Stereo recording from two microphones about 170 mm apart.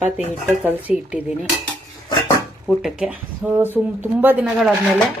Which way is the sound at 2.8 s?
5° right (ahead or behind).